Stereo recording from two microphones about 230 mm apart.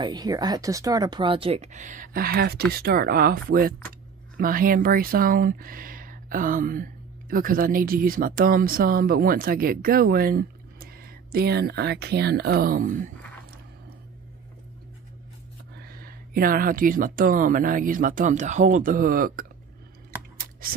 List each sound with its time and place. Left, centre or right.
0.0 s speech: centre; by 13.1 s right
15.7 s speech: right